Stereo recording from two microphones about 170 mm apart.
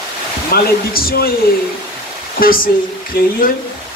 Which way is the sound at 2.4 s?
55° left (ahead or behind).